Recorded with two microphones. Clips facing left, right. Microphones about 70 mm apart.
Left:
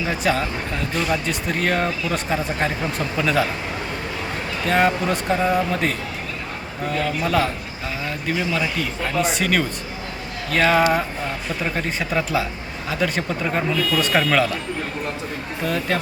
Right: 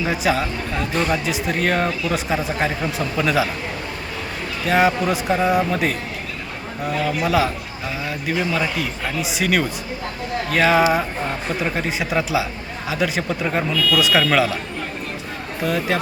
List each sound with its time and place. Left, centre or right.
0.0 s speech: centre
4.6 s speech: centre
13.7 s speech: left
14.3 s speech: centre
15.6 s speech: centre